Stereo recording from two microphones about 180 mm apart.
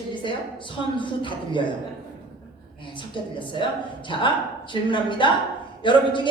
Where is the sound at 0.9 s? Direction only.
25° left (ahead or behind).